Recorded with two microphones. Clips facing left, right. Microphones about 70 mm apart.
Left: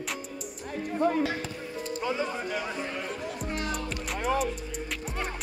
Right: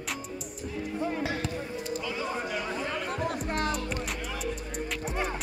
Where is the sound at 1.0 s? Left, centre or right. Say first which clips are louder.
Left 7 dB; left.